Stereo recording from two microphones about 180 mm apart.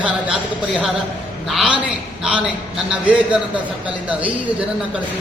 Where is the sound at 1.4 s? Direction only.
Centre (ahead or behind).